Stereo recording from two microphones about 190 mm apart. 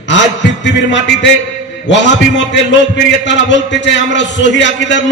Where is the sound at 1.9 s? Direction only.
70° left (ahead or behind).